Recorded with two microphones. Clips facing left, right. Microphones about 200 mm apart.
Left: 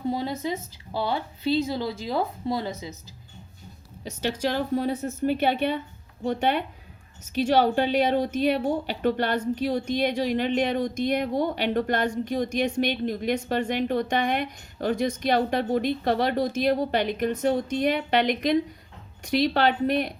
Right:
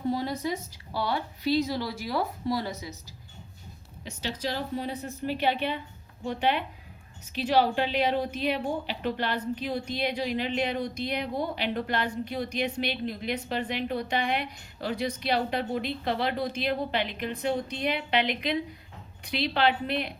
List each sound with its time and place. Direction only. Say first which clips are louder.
0.1 s a sound: left 1 dB; 20° left (ahead or behind)
0.4 s a woman's voice: left 2 dB; 20° left (ahead or behind)
4.2 s a woman's voice: left 6 dB; 55° left (ahead or behind)